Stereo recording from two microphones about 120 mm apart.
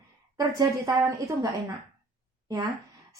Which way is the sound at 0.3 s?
30° right (ahead or behind).